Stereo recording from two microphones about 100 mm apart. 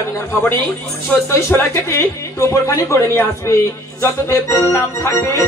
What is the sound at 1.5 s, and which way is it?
Speech, 25° left (ahead or behind).